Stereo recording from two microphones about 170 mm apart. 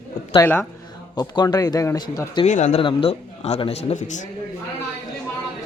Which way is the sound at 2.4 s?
45° left (ahead or behind).